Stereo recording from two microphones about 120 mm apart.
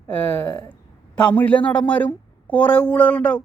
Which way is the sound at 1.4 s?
15° left (ahead or behind).